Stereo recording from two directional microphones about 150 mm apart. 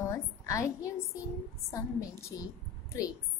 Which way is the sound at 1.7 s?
20° left (ahead or behind).